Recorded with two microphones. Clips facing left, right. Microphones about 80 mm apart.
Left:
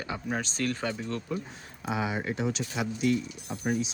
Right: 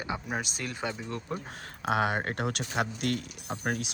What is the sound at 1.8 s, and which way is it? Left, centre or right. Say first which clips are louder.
Speech: right 3 dB; right.